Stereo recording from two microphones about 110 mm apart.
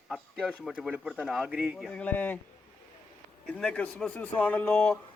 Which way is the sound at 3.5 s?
10° left (ahead or behind).